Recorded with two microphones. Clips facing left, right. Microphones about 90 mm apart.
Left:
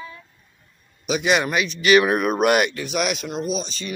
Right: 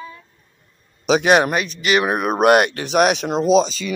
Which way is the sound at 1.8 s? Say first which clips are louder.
Left 4 dB; 25° right (ahead or behind).